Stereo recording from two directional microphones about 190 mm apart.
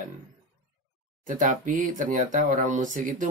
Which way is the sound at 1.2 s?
45° right (ahead or behind).